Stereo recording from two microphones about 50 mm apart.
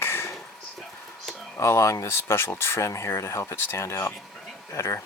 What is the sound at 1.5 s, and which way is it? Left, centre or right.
Speech, left.